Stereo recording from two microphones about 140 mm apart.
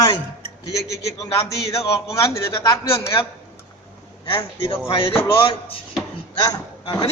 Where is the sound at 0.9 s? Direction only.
20° left (ahead or behind).